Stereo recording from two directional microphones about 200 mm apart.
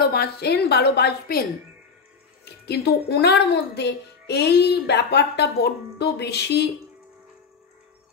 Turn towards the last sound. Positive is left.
turn(degrees=55)  # may be behind; listen again after turning